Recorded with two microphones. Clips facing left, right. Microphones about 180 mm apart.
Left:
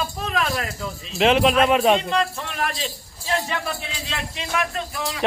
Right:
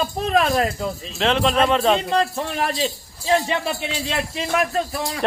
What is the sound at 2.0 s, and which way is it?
A man's voice, 35° right (ahead or behind).